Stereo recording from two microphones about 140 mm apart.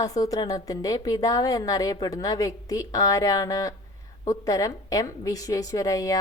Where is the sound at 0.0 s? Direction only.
25° left (ahead or behind).